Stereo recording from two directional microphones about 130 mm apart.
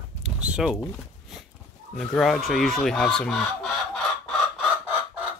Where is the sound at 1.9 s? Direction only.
5° left (ahead or behind).